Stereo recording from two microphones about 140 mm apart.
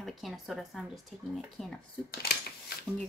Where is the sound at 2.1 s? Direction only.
90° left.